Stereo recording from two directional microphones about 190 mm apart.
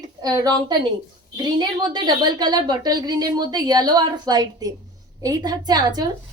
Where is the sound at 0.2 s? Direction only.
20° right (ahead or behind).